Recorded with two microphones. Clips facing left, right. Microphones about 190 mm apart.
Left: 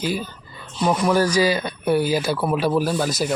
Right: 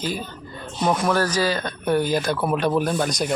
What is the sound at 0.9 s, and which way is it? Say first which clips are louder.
Speech: left 2 dB; 10° left (ahead or behind).